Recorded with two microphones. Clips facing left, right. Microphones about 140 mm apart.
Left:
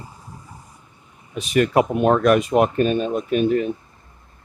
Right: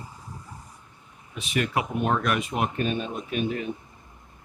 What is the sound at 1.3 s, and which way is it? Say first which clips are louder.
Speech: left 9 dB; 40° left (ahead or behind).